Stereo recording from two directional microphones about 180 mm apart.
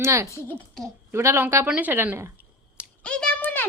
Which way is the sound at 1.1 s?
15° right (ahead or behind).